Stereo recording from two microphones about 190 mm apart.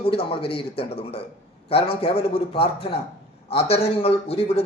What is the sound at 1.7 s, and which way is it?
Speech, 30° left (ahead or behind).